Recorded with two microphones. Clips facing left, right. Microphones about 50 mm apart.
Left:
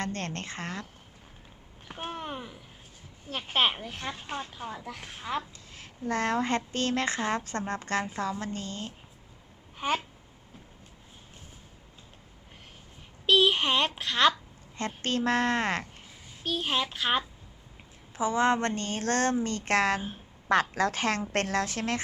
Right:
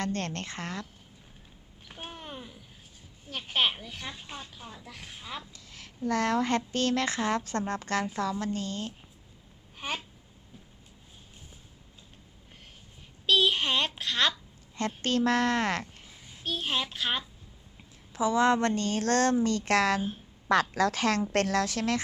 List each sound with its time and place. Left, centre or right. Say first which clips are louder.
0.0 s speech: right 1 dB; centre
2.0 s a sound: left 6 dB; left
2.2 s a sound: left 5 dB; left
3.2 s speech: left 2 dB; left
5.7 s speech: right 2 dB; left
13.2 s a woman's voice: left 2 dB; left
16.4 s a child's voice: left 2 dB; centre
18.1 s a woman's voice: right 1 dB; centre